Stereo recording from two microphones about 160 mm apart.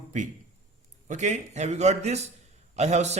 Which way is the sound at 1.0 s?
50° right (ahead or behind).